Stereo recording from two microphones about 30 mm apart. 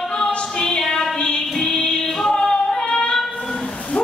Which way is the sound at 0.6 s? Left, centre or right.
Centre.